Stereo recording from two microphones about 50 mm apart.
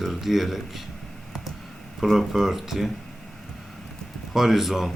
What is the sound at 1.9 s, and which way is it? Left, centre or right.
Speech, centre.